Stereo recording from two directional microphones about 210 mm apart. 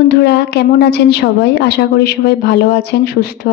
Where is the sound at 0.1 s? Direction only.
50° left (ahead or behind).